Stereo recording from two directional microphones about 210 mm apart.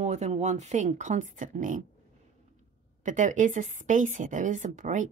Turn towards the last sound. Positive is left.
turn(degrees=-35)  # may be behind; listen again after turning